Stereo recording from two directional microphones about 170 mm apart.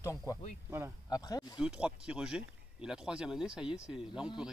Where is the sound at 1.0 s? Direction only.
20° left (ahead or behind).